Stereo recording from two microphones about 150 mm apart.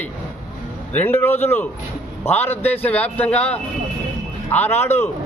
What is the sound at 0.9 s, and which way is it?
A man's voice, 10° left (ahead or behind).